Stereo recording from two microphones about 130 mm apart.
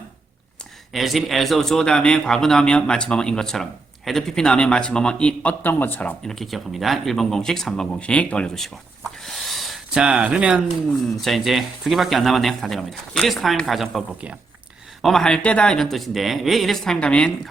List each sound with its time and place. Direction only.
0.9 s a man's voice: centre (ahead or behind)
9.2 s a sound: centre (ahead or behind)
11.2 s a man's voice: centre (ahead or behind)
15.0 s a man's voice: 5° left (ahead or behind)